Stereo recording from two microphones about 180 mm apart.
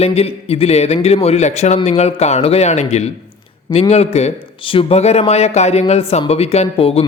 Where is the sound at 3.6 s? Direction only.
25° left (ahead or behind).